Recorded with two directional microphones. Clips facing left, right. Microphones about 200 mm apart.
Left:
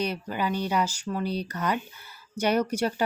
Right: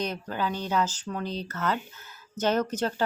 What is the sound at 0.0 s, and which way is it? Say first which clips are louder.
Speech: left 1 dB; 10° left (ahead or behind).